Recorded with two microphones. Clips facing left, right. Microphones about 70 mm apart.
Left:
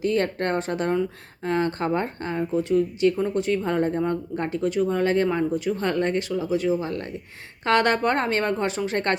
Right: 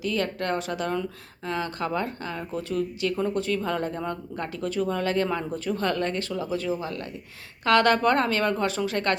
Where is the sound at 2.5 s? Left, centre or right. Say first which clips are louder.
Left 7 dB; left.